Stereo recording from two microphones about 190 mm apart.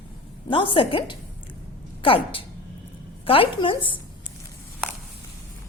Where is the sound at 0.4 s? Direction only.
25° left (ahead or behind).